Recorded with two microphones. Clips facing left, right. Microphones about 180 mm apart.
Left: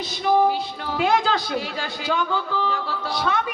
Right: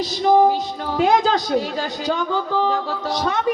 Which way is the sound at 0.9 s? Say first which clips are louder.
Right 4 dB; 40° right (ahead or behind).